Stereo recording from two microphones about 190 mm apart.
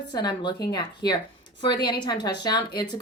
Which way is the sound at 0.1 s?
25° left (ahead or behind).